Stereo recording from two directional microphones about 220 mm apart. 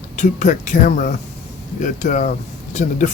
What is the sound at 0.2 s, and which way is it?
Speech, 35° left (ahead or behind).